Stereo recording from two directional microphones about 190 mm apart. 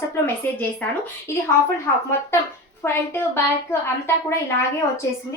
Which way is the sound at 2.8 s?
15° left (ahead or behind).